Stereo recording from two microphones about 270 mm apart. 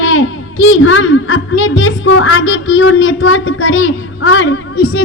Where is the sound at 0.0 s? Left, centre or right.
Left.